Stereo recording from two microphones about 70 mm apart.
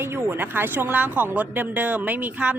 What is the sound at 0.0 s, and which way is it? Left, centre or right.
A woman's voice, right.